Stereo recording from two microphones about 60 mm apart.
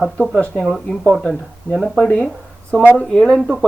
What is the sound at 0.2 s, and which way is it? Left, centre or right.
Speech, centre.